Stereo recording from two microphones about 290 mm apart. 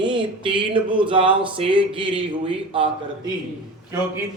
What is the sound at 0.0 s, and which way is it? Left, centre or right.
Speech, centre.